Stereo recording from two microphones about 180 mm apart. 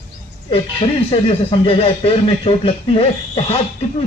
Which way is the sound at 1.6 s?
35° left (ahead or behind).